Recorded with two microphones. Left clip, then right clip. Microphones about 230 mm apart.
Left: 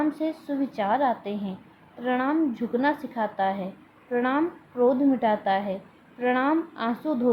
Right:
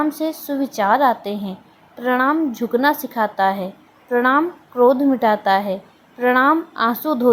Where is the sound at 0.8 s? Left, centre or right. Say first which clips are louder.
Right 9 dB; centre.